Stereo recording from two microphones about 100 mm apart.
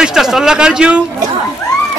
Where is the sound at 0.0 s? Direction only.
5° right (ahead or behind).